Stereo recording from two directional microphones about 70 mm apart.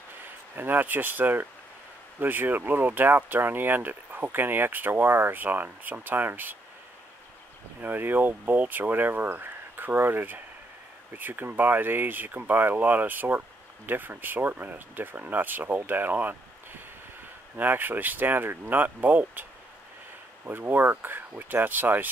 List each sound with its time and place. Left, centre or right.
0.6 s speech: right
7.8 s speech: right
17.6 s speech: right
20.4 s speech: right